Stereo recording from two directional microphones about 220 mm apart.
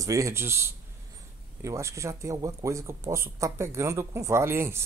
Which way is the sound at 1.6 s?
15° right (ahead or behind).